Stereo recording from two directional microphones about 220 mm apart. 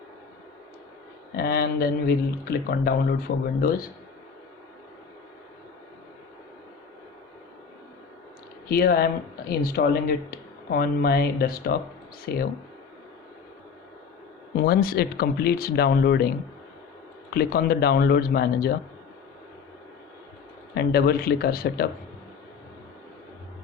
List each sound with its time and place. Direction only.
1.4 s speech: 45° left (ahead or behind)
8.7 s speech: 45° left (ahead or behind)
14.5 s speech: 45° left (ahead or behind)
17.3 s speech: 45° left (ahead or behind)
20.7 s speech: 45° left (ahead or behind)